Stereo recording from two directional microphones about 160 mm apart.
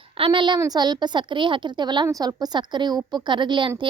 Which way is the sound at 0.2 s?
30° right (ahead or behind).